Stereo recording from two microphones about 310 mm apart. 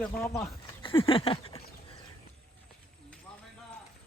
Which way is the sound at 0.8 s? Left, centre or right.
Centre.